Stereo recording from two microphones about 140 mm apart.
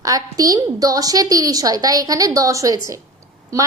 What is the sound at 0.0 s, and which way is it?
A woman's voice, 25° right (ahead or behind).